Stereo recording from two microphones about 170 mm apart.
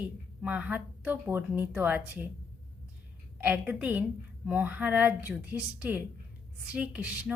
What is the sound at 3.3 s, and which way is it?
A woman's voice, 10° right (ahead or behind).